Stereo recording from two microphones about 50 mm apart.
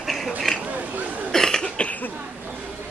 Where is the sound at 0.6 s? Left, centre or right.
Right.